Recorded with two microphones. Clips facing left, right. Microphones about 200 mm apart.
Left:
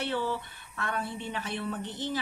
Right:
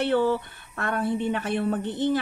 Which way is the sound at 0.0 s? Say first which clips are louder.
Right 9 dB; 55° right (ahead or behind).